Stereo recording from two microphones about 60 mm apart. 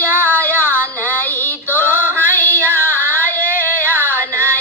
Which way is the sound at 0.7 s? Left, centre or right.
Right.